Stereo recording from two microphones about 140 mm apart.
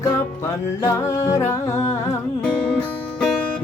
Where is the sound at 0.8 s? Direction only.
25° left (ahead or behind).